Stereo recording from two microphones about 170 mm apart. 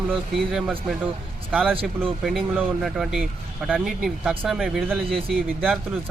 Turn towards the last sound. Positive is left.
turn(degrees=0)  # may be behind; listen again after turning